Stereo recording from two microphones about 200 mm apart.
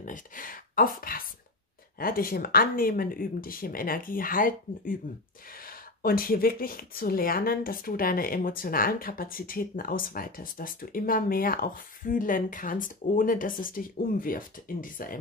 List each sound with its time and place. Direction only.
0.0 s speech: 45° left (ahead or behind)